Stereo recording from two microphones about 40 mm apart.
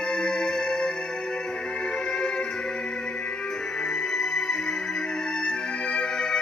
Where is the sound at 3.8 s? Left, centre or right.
Centre.